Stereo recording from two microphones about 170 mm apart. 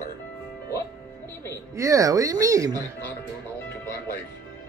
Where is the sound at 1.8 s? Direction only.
20° right (ahead or behind).